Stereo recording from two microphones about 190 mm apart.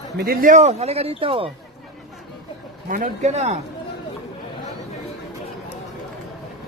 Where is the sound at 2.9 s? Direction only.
40° right (ahead or behind).